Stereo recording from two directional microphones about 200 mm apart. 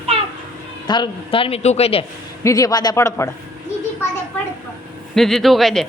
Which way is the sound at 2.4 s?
15° left (ahead or behind).